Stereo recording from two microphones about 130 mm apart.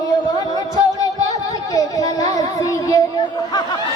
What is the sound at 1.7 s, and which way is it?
Child singing, 25° left (ahead or behind).